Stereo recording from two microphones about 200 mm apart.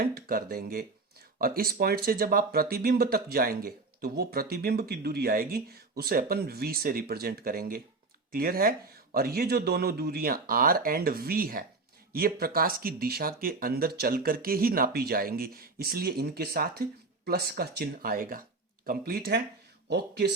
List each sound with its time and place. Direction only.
0.0 s speech: 45° right (ahead or behind)